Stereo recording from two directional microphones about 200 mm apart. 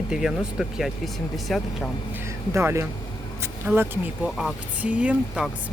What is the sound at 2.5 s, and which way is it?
Speech, 15° right (ahead or behind).